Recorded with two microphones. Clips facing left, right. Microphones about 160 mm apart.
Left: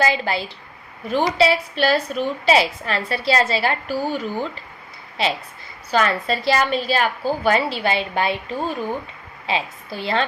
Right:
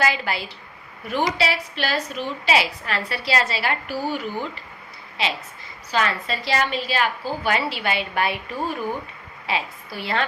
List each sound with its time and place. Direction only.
0.0 s a woman's voice: 30° left (ahead or behind)
5.9 s a woman's voice: 40° left (ahead or behind)